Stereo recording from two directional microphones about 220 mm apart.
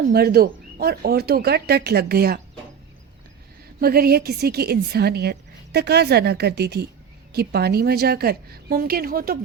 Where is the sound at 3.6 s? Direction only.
45° right (ahead or behind).